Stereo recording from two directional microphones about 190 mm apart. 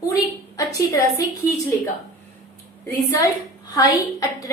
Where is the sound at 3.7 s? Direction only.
20° left (ahead or behind).